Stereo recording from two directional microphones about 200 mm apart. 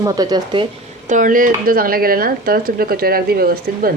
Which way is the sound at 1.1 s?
40° right (ahead or behind).